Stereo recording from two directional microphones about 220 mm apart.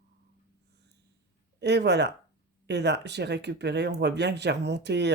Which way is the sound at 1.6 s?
50° right (ahead or behind).